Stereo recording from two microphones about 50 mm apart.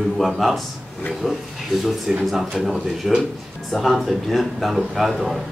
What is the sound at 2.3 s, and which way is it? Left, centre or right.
Speech, centre.